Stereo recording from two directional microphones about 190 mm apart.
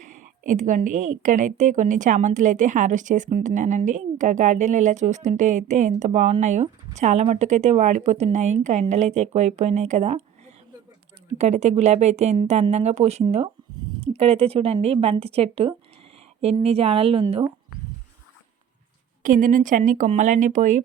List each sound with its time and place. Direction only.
0.0 s a woman's voice: 40° right (ahead or behind)
11.3 s a woman's voice: 35° right (ahead or behind)
19.2 s a woman's voice: 45° right (ahead or behind)